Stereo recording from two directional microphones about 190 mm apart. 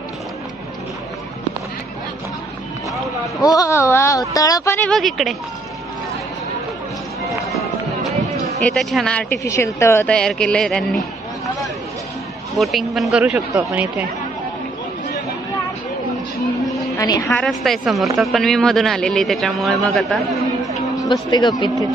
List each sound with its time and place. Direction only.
3.3 s speech: 15° left (ahead or behind)
4.8 s speech: centre (ahead or behind)
8.6 s speech: 5° left (ahead or behind)
12.5 s speech: centre (ahead or behind)
16.9 s a sound: 20° left (ahead or behind)
17.4 s speech: centre (ahead or behind)
21.3 s a man's voice: 20° left (ahead or behind)